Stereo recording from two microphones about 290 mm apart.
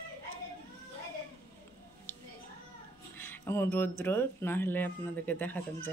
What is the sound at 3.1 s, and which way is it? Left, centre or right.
Speech, centre.